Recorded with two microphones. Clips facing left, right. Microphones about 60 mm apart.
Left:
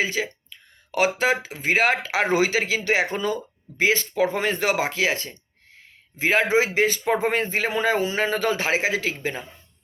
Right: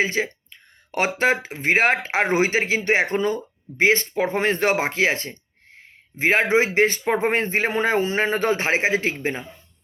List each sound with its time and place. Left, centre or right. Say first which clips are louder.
0.0 s speech: right 3 dB; right